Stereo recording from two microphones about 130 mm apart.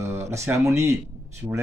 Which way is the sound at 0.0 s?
20° right (ahead or behind).